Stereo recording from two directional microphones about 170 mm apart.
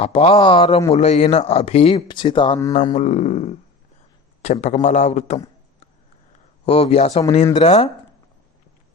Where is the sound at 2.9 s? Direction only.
40° left (ahead or behind).